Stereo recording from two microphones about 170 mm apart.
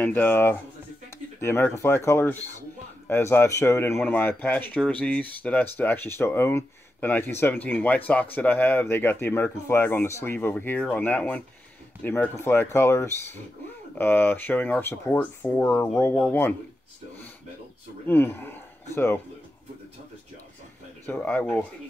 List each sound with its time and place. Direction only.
0.0 s speech: 10° left (ahead or behind)
18.0 s speech: 10° left (ahead or behind)
21.0 s speech: 10° left (ahead or behind)